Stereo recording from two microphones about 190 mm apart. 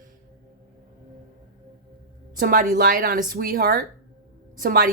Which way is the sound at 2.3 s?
45° right (ahead or behind).